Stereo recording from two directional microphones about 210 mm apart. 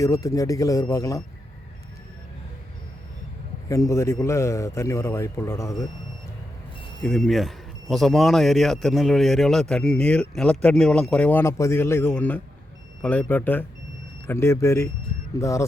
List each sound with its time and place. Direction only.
0.0 s a man's voice: 15° left (ahead or behind)
3.7 s a man's voice: 15° left (ahead or behind)
7.0 s a man's voice: centre (ahead or behind)